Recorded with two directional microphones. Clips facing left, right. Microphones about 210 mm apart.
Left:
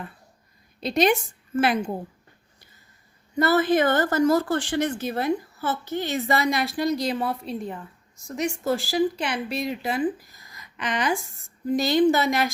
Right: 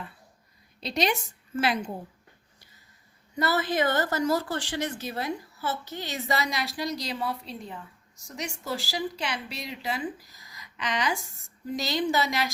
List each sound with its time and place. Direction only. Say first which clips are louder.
0.8 s speech: left 7 dB; 50° left (ahead or behind)
3.3 s speech: left 6 dB; 50° left (ahead or behind)